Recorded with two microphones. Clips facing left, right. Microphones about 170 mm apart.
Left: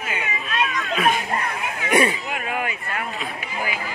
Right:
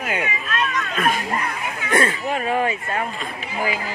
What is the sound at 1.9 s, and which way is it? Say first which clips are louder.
Speech: left 1 dB; 15° left (ahead or behind).